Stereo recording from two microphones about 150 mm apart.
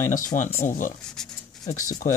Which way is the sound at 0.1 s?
60° left (ahead or behind).